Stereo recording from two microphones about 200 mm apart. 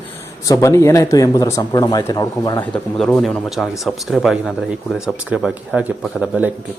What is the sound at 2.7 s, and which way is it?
Speech, 5° left (ahead or behind).